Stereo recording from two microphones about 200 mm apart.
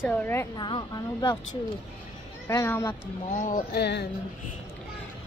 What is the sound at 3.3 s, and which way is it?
Speech, 40° left (ahead or behind).